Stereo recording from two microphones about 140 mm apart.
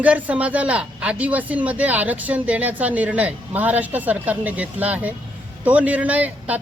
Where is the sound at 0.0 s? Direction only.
10° right (ahead or behind).